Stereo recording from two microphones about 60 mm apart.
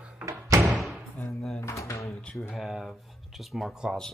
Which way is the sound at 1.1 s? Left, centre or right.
Left.